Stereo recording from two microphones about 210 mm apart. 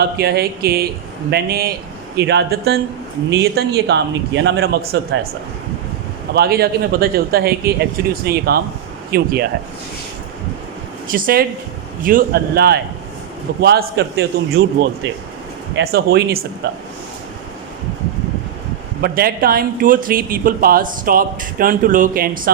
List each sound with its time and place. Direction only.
0.2 s speech: 50° right (ahead or behind)
6.3 s speech: 45° right (ahead or behind)
11.1 s speech: 40° right (ahead or behind)
19.0 s speech: 45° right (ahead or behind)